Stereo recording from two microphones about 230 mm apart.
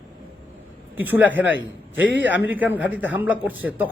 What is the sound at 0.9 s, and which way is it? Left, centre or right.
A man's voice, centre.